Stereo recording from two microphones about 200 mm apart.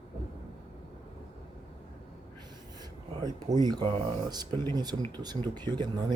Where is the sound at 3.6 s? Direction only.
20° right (ahead or behind).